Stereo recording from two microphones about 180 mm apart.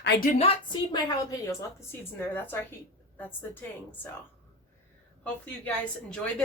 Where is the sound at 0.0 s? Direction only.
65° left (ahead or behind).